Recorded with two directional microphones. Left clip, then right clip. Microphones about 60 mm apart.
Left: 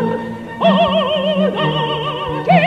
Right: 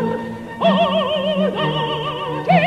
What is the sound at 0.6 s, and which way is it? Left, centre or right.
Opera, left.